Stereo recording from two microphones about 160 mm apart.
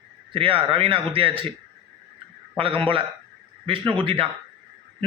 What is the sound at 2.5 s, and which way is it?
A man's voice, 35° right (ahead or behind).